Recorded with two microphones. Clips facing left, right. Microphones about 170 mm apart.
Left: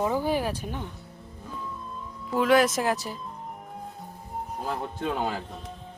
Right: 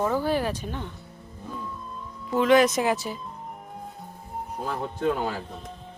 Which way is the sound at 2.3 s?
5° left (ahead or behind).